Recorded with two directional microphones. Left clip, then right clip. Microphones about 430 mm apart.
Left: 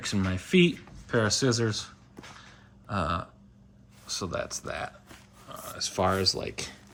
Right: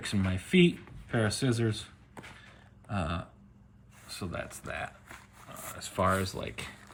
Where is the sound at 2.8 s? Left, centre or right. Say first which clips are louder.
Left 6 dB; centre.